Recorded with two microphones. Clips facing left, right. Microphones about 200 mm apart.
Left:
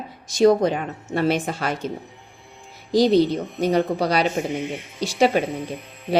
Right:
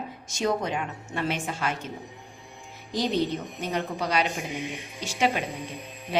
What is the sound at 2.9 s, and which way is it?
A woman's voice, 35° left (ahead or behind).